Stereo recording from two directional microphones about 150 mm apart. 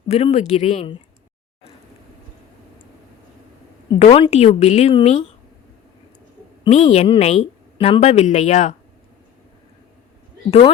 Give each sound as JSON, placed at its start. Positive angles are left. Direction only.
{"t": 0.1, "sound": "a woman's voice", "side_deg": 45}
{"t": 3.9, "sound": "a woman's voice", "side_deg": 45}
{"t": 6.7, "sound": "a woman's voice", "side_deg": 45}